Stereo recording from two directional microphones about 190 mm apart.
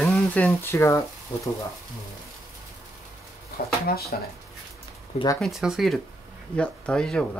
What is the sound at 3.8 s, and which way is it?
Speech, 55° left (ahead or behind).